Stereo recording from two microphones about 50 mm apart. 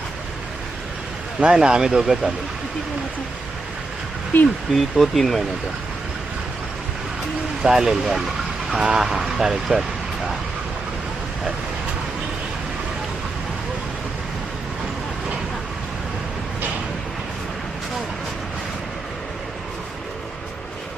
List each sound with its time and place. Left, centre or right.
1.4 s speech: centre
4.3 s speech: left
4.7 s speech: centre
7.6 s speech: centre